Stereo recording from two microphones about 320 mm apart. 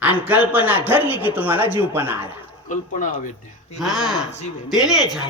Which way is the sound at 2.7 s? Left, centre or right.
Left.